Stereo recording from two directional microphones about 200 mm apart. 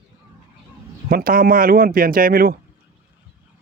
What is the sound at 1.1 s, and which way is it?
Speech, 45° right (ahead or behind).